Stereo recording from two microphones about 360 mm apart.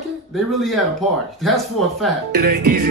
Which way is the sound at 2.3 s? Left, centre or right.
Right.